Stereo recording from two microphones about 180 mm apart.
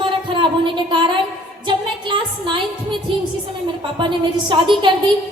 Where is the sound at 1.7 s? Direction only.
25° right (ahead or behind).